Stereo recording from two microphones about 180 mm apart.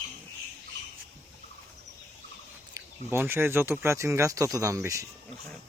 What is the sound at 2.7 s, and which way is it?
Speech, 15° right (ahead or behind).